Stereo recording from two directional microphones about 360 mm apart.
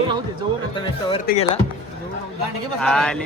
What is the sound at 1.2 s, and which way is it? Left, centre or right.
Speech, left.